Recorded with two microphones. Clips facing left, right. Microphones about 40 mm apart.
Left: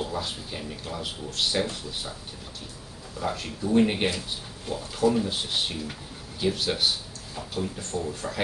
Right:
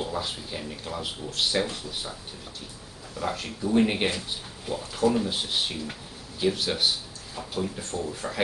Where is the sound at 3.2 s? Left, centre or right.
Centre.